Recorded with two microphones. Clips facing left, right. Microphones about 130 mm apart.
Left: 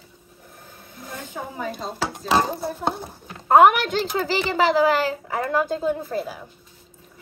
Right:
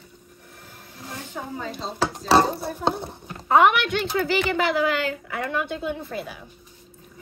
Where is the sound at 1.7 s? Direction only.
50° left (ahead or behind).